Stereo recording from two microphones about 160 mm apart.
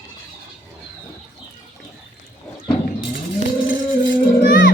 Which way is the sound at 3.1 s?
60° left (ahead or behind).